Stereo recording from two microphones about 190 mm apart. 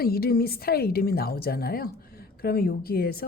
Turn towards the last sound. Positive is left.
turn(degrees=50)  # may be behind; listen again after turning